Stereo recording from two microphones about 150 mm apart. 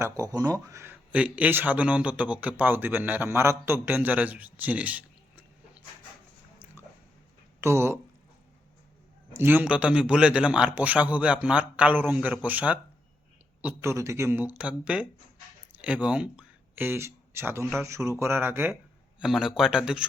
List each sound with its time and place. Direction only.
0.0 s speech: 25° right (ahead or behind)
7.6 s speech: 15° right (ahead or behind)
9.3 s speech: 15° right (ahead or behind)
19.2 s speech: centre (ahead or behind)